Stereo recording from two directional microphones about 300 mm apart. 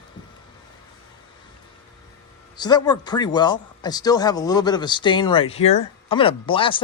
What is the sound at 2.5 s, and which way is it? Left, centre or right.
Speech, centre.